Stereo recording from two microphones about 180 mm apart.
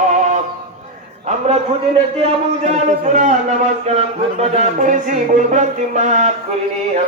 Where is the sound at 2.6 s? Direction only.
40° right (ahead or behind).